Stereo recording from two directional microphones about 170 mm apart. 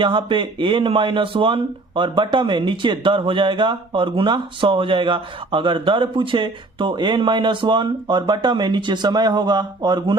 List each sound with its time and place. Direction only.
0.0 s speech: 30° right (ahead or behind)